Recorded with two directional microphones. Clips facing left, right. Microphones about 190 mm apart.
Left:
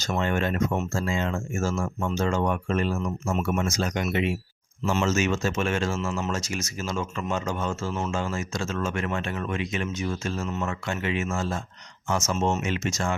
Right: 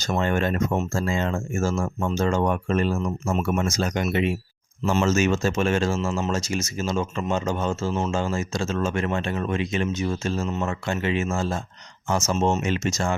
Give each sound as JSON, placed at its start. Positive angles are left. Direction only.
{"t": 0.0, "sound": "speech", "side_deg": -40}